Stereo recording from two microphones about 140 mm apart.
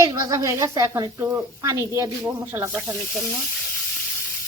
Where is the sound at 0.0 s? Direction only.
20° right (ahead or behind).